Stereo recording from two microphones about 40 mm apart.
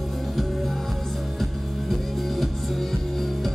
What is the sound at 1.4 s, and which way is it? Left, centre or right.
Music, centre.